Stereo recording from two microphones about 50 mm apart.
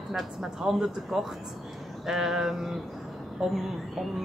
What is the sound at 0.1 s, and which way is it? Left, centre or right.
Speech, centre.